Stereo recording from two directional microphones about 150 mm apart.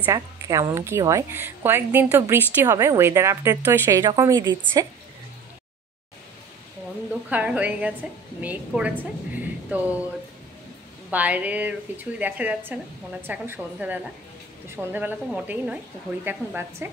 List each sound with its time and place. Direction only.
0.0 s a woman's voice: 20° right (ahead or behind)
4.0 s a woman's voice: 25° right (ahead or behind)
7.2 s a woman's voice: 10° right (ahead or behind)
11.1 s a woman's voice: 10° right (ahead or behind)